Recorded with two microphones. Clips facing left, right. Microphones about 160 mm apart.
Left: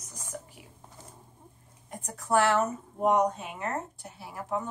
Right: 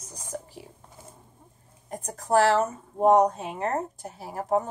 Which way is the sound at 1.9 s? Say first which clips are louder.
Right 3 dB; 40° right (ahead or behind).